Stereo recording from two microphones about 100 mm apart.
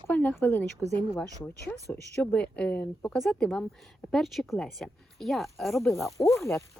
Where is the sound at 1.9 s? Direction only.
20° left (ahead or behind); by 6.2 s centre (ahead or behind).